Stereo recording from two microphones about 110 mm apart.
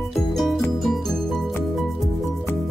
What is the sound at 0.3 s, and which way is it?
Music, centre (ahead or behind).